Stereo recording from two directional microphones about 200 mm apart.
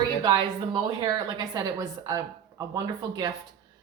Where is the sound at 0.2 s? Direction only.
20° right (ahead or behind).